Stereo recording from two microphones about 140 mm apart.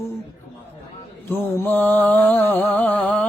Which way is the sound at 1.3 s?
15° left (ahead or behind).